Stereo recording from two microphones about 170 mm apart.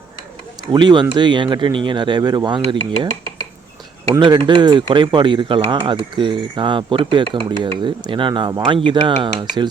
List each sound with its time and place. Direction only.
0.7 s speech: 25° right (ahead or behind)
4.1 s speech: 25° right (ahead or behind)